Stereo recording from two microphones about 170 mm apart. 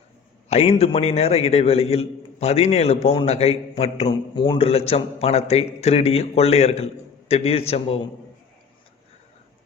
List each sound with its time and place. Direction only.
0.4 s a man's voice: 40° left (ahead or behind)